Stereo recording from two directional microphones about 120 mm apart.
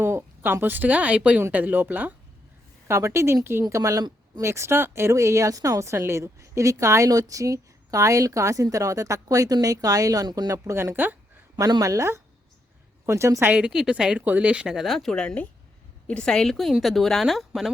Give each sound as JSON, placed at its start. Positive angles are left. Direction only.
{"t": 0.0, "sound": "speech", "side_deg": -20}
{"t": 11.5, "sound": "speech", "side_deg": -35}
{"t": 13.5, "sound": "speech", "side_deg": -10}